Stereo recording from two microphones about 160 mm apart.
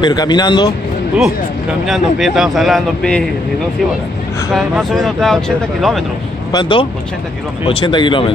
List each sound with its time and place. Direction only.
0.0 s speech: 25° left (ahead or behind)
1.9 s speech: centre (ahead or behind)
4.6 s speech: centre (ahead or behind)
6.5 s speech: 30° left (ahead or behind)